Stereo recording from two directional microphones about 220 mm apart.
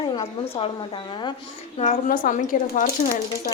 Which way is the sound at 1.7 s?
35° left (ahead or behind).